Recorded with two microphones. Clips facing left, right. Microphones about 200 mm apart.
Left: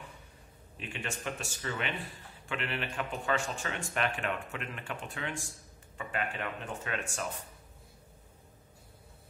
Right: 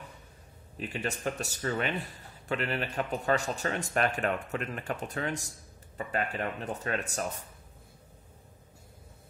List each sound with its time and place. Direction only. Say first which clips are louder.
0.7 s speech: right 5 dB; 40° right (ahead or behind)